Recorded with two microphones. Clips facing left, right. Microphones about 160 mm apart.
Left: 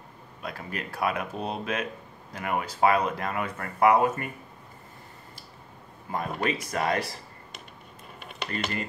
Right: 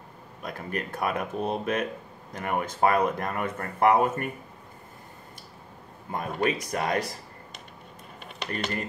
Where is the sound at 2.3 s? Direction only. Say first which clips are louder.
Right 1 dB; 45° right (ahead or behind).